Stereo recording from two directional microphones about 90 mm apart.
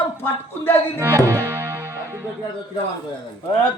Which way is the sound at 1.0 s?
30° right (ahead or behind).